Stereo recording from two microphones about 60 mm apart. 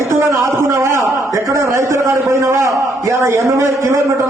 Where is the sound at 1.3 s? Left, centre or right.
Right.